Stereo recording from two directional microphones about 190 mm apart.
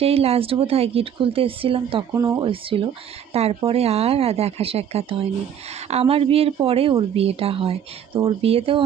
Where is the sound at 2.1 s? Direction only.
15° right (ahead or behind).